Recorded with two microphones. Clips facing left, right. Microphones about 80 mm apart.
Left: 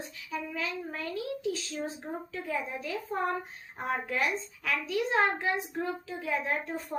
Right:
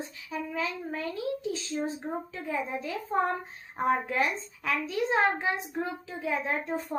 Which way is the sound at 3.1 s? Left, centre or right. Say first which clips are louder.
Right 4 dB; right.